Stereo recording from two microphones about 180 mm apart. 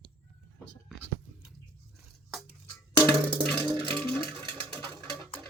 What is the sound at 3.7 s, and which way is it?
Music, 25° right (ahead or behind).